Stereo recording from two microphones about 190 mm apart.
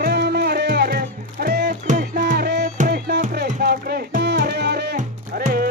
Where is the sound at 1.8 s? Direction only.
40° right (ahead or behind).